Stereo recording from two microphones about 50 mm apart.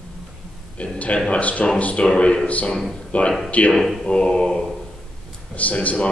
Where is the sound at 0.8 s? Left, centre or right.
Left.